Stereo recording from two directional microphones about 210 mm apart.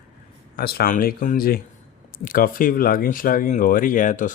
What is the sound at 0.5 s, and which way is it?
Speech, 45° left (ahead or behind).